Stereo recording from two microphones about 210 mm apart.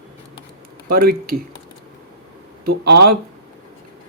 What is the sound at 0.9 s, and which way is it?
Speech, 45° right (ahead or behind).